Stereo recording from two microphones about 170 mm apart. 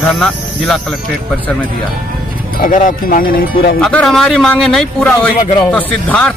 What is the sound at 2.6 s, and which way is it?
Speech, 50° left (ahead or behind).